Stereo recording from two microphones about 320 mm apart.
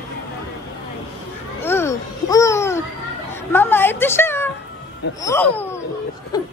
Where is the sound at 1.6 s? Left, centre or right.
Centre.